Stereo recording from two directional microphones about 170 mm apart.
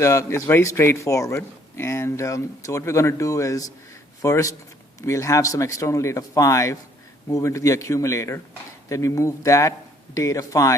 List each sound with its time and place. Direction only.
0.0 s speech: 15° left (ahead or behind)